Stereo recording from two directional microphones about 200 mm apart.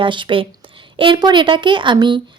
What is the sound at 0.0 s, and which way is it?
A woman's voice, 25° right (ahead or behind).